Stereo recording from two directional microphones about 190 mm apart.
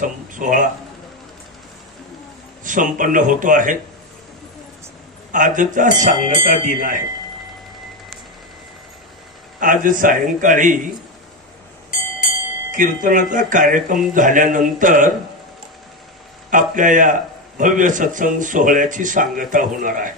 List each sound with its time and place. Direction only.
0.0 s a man's voice: 45° right (ahead or behind)
2.6 s a man's voice: 45° right (ahead or behind)
5.3 s a man's voice: 45° right (ahead or behind)
9.6 s a man's voice: 45° right (ahead or behind)
12.7 s a man's voice: 45° right (ahead or behind)
16.4 s a man's voice: 45° right (ahead or behind)